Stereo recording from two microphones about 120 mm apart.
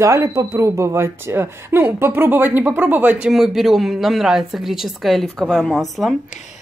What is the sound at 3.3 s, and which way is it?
A woman's voice, centre (ahead or behind).